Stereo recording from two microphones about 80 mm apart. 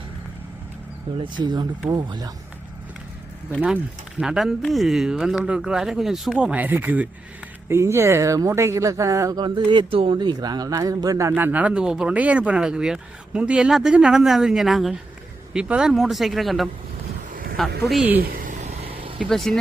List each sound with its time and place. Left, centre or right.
1.2 s speech: right
4.2 s speech: centre
6.4 s speech: centre
7.7 s speech: right
9.4 s speech: right
11.3 s speech: right; by 14.9 s centre
15.5 s speech: centre
19.2 s speech: centre